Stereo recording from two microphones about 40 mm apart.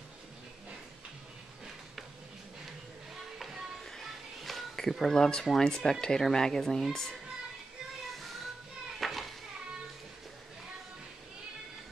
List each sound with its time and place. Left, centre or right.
3.3 s a sound: centre
3.8 s music: centre
4.7 s speech: centre
9.0 s children playing: centre